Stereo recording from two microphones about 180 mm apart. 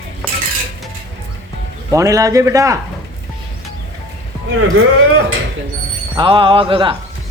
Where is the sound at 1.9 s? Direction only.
20° right (ahead or behind).